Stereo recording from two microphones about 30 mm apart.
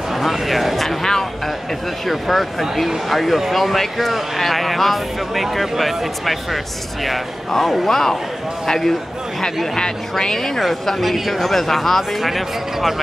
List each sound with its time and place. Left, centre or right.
0.1 s speech: centre
0.7 s speech: centre
2.0 s speech: centre
7.6 s speech: centre
11.0 s speech: centre
11.5 s speech: centre
12.2 s speech: centre